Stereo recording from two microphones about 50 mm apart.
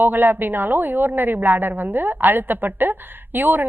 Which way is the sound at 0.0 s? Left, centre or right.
Right.